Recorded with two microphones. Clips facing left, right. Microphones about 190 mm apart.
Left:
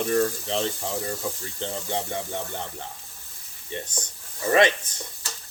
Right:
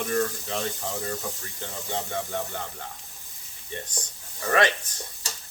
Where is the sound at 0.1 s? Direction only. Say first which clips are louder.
Left 3 dB; 20° left (ahead or behind).